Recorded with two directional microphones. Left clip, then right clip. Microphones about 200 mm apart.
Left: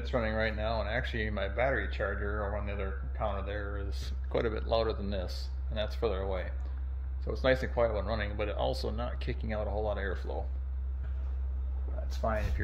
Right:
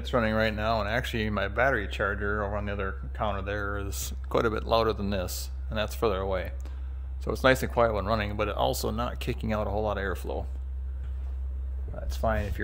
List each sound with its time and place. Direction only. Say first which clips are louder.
0.0 s speech: right 6 dB; 55° right (ahead or behind)
12.2 s speech: right 5 dB; 55° right (ahead or behind)